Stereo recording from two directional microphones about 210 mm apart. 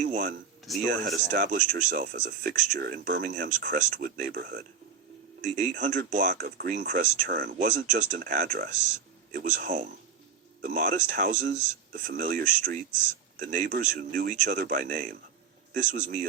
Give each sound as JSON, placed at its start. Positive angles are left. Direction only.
{"t": 0.0, "sound": "speech", "side_deg": -40}
{"t": 0.7, "sound": "speech", "side_deg": 0}
{"t": 1.1, "sound": "speech", "side_deg": -40}